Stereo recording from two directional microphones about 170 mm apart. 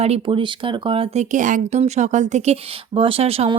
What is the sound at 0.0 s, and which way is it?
Speech, 35° right (ahead or behind).